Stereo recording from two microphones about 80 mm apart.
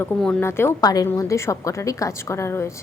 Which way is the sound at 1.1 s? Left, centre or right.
Left.